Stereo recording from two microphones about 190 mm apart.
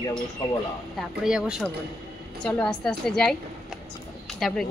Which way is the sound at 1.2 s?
5° right (ahead or behind).